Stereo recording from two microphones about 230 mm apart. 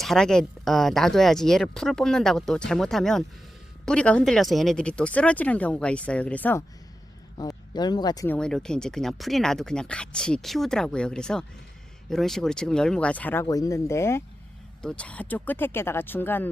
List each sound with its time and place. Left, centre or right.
0.0 s speech: centre
7.3 s speech: centre
8.4 s speech: centre